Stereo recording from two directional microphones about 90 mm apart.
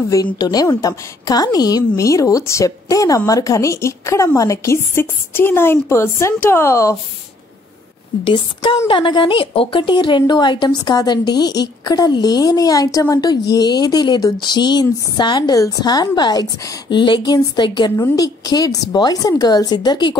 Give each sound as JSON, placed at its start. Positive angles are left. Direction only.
{"t": 0.1, "sound": "a woman's voice", "side_deg": 45}
{"t": 8.2, "sound": "a sound", "side_deg": 80}
{"t": 8.8, "sound": "speech", "side_deg": 60}
{"t": 18.1, "sound": "speech", "side_deg": 45}